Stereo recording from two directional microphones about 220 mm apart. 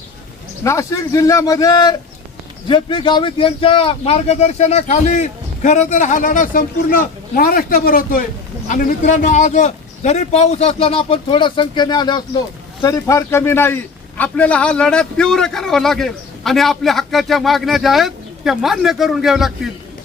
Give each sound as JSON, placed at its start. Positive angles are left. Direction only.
{"t": 0.6, "sound": "a man's voice", "side_deg": 15}